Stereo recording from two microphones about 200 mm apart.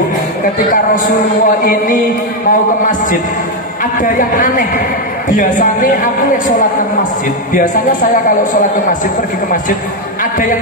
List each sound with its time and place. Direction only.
0.9 s a man's voice: 40° left (ahead or behind)